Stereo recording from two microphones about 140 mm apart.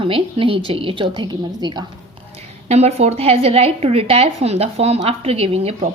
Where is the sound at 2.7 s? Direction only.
50° right (ahead or behind).